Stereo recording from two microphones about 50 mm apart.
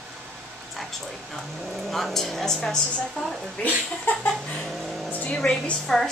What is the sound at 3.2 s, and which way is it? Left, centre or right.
Speech, left.